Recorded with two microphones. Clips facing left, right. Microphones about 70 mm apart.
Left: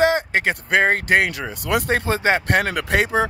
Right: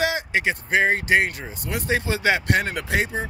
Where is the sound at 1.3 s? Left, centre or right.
Left.